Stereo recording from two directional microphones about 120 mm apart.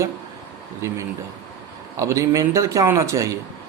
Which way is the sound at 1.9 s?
25° right (ahead or behind).